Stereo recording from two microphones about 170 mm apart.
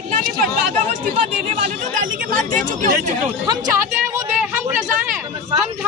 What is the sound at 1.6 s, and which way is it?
Speech, 50° right (ahead or behind).